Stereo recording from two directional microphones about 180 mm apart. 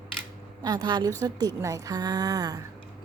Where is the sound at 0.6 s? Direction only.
25° right (ahead or behind).